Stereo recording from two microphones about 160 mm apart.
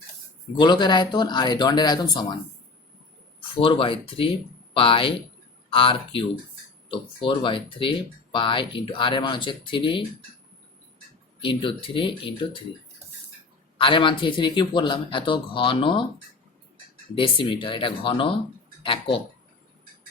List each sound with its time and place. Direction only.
0.6 s speech: 30° left (ahead or behind)
3.6 s speech: 35° left (ahead or behind)
11.3 s speech: 30° left (ahead or behind)
13.7 s speech: 30° left (ahead or behind)
17.2 s speech: 30° left (ahead or behind)